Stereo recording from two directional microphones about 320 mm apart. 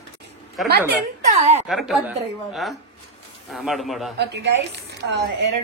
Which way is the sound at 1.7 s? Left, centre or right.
Centre.